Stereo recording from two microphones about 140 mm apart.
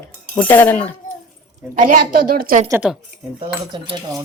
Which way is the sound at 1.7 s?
85° right.